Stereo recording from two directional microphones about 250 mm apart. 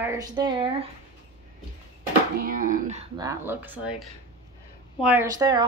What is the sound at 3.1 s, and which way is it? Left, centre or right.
A woman's voice, centre.